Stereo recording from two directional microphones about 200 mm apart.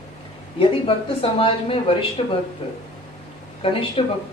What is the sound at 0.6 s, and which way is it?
A woman's voice, 25° left (ahead or behind).